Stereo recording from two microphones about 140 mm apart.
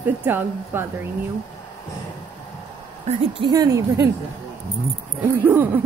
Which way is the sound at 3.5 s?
25° right (ahead or behind).